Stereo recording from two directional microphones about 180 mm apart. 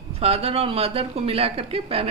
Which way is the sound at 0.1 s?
35° right (ahead or behind).